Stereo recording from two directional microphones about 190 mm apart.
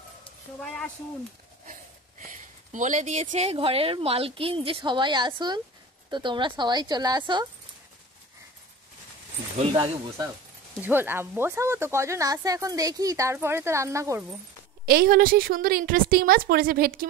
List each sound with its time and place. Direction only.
1.7 s speech: 40° right (ahead or behind); by 7.4 s 25° right (ahead or behind)
9.6 s speech: 30° right (ahead or behind)
10.8 s speech: 10° right (ahead or behind)
14.9 s a woman's voice: 50° right (ahead or behind)